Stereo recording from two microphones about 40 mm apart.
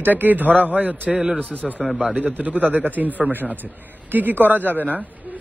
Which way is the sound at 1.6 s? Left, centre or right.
Centre.